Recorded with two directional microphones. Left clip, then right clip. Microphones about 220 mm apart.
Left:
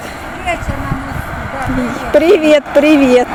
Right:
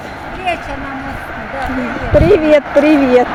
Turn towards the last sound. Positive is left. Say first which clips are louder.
# left 1 dB
turn(degrees=15)  # may be behind; listen again after turning